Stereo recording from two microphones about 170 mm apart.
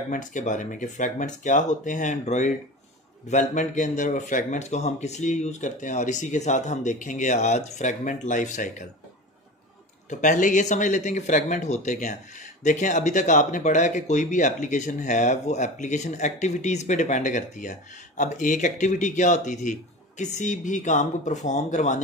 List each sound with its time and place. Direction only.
0.1 s speech: 50° left (ahead or behind)
10.0 s speech: 45° left (ahead or behind)